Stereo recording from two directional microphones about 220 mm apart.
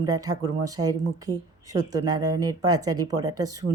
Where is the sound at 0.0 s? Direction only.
15° right (ahead or behind).